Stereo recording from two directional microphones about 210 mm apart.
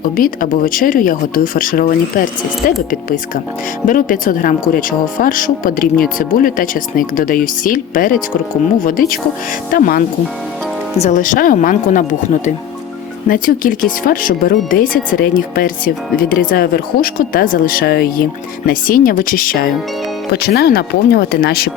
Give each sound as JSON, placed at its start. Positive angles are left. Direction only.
{"t": 0.0, "sound": "speech", "side_deg": 40}
{"t": 3.8, "sound": "speech", "side_deg": 40}
{"t": 11.0, "sound": "speech", "side_deg": 35}